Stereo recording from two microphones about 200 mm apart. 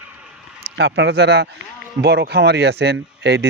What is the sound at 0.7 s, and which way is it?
Speech, 60° right (ahead or behind).